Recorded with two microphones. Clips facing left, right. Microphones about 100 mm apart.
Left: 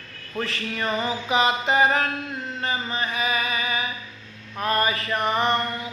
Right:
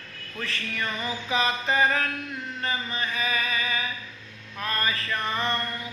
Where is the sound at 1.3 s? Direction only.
20° left (ahead or behind).